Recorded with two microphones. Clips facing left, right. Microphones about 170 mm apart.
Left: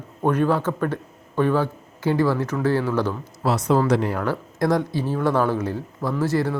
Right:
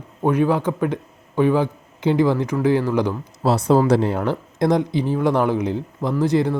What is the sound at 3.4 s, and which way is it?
Speech, 30° right (ahead or behind).